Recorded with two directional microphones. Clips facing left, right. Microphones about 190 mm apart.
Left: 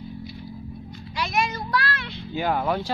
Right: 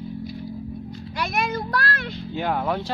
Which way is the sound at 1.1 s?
55° right (ahead or behind).